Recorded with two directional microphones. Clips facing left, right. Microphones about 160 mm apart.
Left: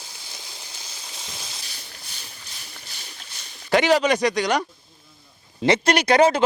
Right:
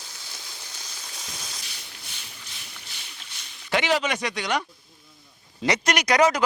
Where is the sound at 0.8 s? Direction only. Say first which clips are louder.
Left 1 dB; 25° left (ahead or behind).